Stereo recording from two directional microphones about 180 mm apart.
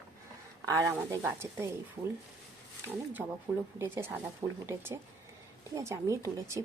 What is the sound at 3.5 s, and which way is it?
Speech, 15° right (ahead or behind).